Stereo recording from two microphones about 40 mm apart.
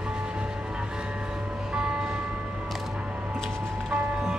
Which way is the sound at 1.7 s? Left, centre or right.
Right.